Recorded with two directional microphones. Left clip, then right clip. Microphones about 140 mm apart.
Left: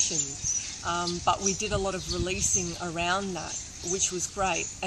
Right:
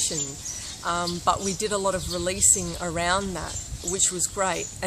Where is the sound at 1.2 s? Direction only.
25° right (ahead or behind).